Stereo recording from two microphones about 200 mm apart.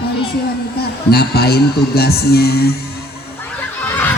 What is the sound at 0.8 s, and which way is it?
Speech, 50° left (ahead or behind).